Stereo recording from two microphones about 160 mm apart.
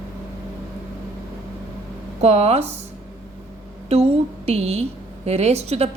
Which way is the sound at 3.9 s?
40° right (ahead or behind).